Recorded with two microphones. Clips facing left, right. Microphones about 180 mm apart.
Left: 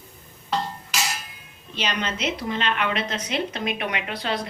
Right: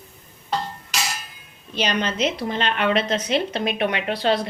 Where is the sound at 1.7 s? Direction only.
40° right (ahead or behind).